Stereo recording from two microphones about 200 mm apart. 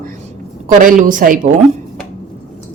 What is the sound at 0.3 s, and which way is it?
A woman's voice, 40° right (ahead or behind).